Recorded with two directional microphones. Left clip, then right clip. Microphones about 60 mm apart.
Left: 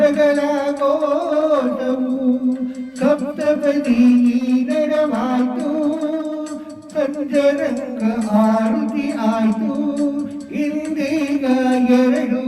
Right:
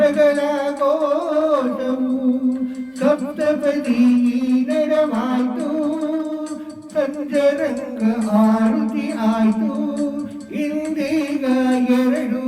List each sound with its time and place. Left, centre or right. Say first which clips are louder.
0.0 s music: even; left
3.0 s music: even; left
7.3 s music: left 1 dB; left
11.1 s music: left 2 dB; left